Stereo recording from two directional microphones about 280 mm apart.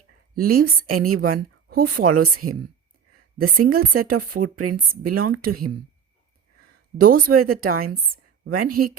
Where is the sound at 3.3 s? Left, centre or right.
Right.